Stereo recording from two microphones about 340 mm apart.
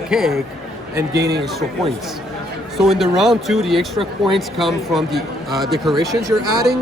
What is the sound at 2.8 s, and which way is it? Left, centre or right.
Speech, centre.